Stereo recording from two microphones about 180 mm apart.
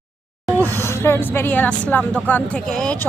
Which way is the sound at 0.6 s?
15° left (ahead or behind).